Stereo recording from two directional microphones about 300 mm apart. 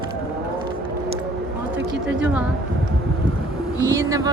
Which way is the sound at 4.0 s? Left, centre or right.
Centre.